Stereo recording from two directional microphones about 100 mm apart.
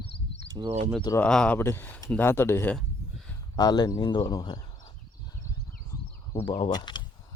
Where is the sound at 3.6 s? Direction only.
40° left (ahead or behind).